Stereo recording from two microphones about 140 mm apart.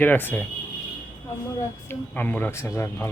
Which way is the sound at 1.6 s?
15° left (ahead or behind).